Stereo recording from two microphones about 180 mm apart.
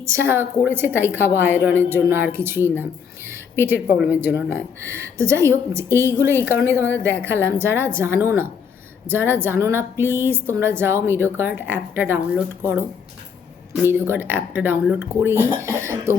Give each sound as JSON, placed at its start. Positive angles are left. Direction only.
{"t": 0.0, "sound": "a woman's voice", "side_deg": -15}
{"t": 3.9, "sound": "a woman's voice", "side_deg": -5}
{"t": 13.8, "sound": "a woman's voice", "side_deg": -10}
{"t": 15.5, "sound": "cough", "side_deg": -15}